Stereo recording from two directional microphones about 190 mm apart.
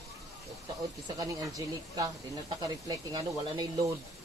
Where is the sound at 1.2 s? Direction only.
20° right (ahead or behind).